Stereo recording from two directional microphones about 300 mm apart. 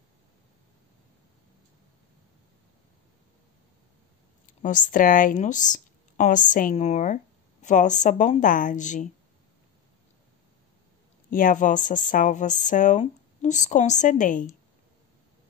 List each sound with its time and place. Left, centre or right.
4.6 s speech: left
11.2 s speech: left